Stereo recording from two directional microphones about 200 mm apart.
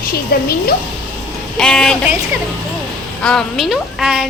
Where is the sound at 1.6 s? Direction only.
5° left (ahead or behind).